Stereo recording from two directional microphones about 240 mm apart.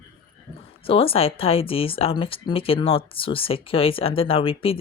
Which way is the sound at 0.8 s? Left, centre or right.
Left.